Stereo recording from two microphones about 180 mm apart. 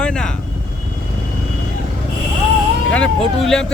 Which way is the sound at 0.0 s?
5° left (ahead or behind).